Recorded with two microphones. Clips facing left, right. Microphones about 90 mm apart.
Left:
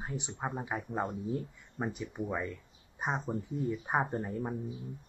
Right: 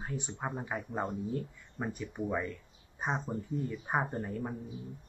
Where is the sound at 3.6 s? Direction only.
15° left (ahead or behind).